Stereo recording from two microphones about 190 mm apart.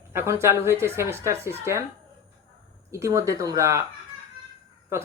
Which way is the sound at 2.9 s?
15° right (ahead or behind).